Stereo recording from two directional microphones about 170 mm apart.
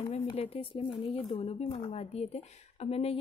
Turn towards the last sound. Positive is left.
turn(degrees=35)  # may be behind; listen again after turning